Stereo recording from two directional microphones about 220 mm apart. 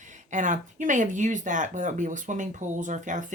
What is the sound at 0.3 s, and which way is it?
Speech, 35° right (ahead or behind).